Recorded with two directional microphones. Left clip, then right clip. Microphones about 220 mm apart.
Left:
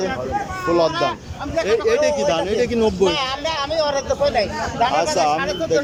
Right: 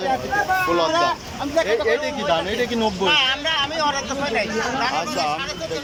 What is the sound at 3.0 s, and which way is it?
Speech, 20° left (ahead or behind).